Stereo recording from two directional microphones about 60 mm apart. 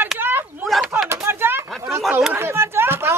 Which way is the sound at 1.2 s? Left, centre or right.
Right.